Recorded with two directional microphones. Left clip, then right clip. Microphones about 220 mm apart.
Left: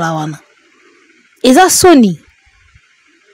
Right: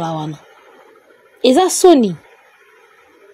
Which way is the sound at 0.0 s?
45° left (ahead or behind).